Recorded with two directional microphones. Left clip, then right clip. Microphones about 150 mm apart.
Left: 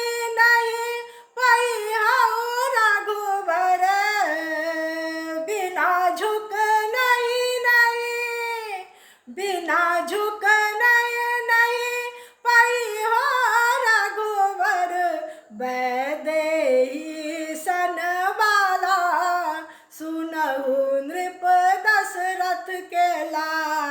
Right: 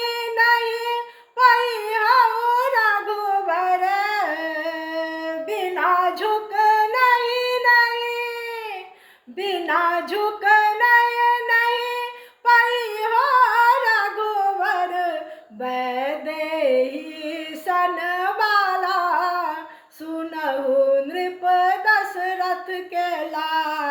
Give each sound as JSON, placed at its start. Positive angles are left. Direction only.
{"t": 0.3, "sound": "child singing", "side_deg": 30}
{"t": 5.5, "sound": "female singing", "side_deg": 30}
{"t": 9.4, "sound": "music", "side_deg": 30}
{"t": 12.5, "sound": "female singing", "side_deg": 25}
{"t": 15.6, "sound": "music", "side_deg": 30}
{"t": 17.2, "sound": "female singing", "side_deg": 30}
{"t": 21.2, "sound": "a sound", "side_deg": 30}